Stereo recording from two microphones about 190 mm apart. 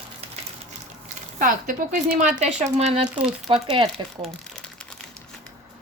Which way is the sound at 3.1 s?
5° right (ahead or behind).